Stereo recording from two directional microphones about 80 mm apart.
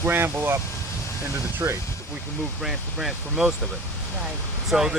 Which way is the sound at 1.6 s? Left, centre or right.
Right.